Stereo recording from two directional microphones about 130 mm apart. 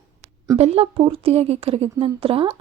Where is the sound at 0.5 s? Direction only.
50° right (ahead or behind).